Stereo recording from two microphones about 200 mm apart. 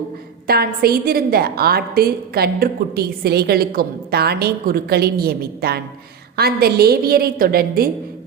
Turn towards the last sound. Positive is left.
turn(degrees=-50)  # may be behind; listen again after turning